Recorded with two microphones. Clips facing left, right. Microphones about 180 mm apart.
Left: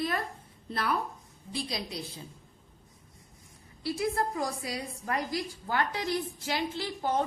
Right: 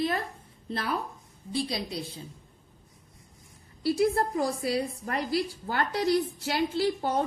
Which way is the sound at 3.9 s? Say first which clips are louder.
Right 4 dB; 35° right (ahead or behind).